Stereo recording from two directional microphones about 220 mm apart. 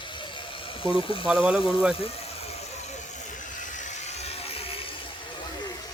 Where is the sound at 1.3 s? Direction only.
5° right (ahead or behind).